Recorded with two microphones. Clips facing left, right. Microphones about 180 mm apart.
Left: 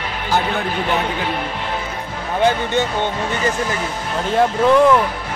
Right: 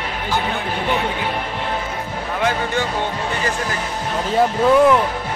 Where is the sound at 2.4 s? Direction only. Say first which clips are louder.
Left 4 dB; 30° left (ahead or behind).